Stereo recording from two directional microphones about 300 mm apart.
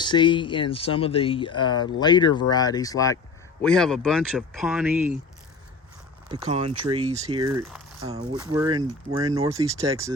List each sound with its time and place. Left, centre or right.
0.0 s speech: centre
6.3 s speech: centre